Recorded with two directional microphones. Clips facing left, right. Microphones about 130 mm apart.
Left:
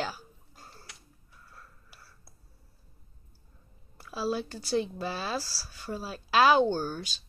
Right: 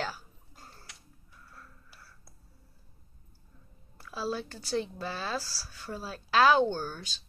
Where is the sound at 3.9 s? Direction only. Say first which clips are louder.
Left 3 dB; 10° left (ahead or behind).